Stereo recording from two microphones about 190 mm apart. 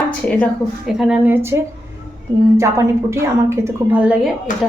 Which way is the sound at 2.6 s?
15° right (ahead or behind).